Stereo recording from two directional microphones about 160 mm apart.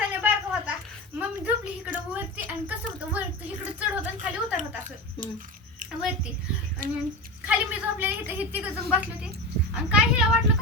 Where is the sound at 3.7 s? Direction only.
10° right (ahead or behind).